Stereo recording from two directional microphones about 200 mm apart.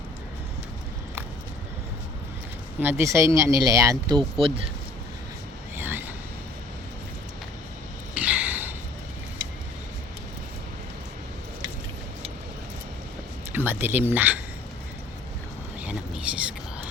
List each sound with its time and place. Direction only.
2.8 s speech: 15° right (ahead or behind)
4.4 s speech: 25° right (ahead or behind)
5.7 s vehicle: 10° right (ahead or behind)
8.1 s a sound: 5° right (ahead or behind)
13.5 s speech: 10° right (ahead or behind)
15.8 s a sound: 5° right (ahead or behind)